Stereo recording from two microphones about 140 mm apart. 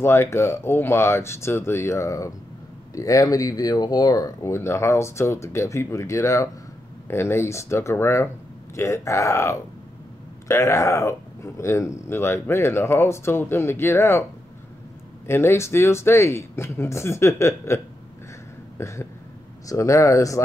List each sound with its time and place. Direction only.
0.0 s speech: 20° left (ahead or behind)
15.2 s speech: 15° left (ahead or behind)
18.8 s speech: 20° left (ahead or behind)